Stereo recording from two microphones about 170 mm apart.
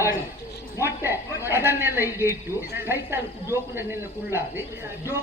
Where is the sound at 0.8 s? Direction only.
15° right (ahead or behind).